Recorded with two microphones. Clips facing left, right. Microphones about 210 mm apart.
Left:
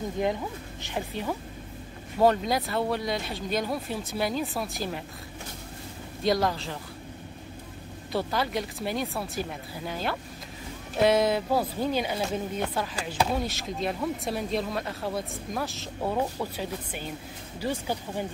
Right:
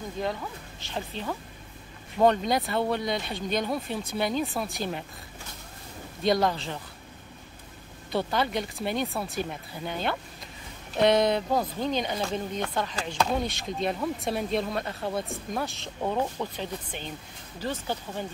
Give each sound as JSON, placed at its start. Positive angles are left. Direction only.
{"t": 0.2, "sound": "speech", "side_deg": 15}
{"t": 6.4, "sound": "speech", "side_deg": 0}
{"t": 8.1, "sound": "speech", "side_deg": 0}